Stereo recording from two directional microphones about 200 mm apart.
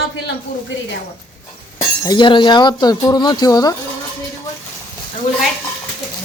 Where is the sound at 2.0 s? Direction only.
20° left (ahead or behind).